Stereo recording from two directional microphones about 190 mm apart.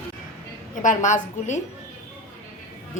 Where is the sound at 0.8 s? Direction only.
40° left (ahead or behind).